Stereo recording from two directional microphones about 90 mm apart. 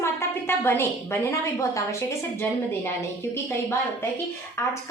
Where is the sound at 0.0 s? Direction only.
25° left (ahead or behind).